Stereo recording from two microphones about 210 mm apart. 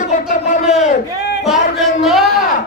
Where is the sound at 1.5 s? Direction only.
Centre (ahead or behind).